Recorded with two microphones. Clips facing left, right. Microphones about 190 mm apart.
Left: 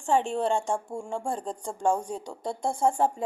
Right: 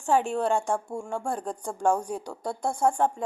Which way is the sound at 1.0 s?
25° left (ahead or behind).